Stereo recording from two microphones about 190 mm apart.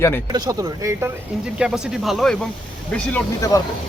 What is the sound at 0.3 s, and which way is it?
Speech, 20° right (ahead or behind).